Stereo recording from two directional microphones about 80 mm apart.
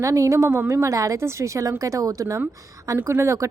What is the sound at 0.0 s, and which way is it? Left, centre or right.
Speech, right.